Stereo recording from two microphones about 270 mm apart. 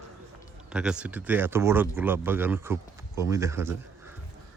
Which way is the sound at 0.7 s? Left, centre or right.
Centre.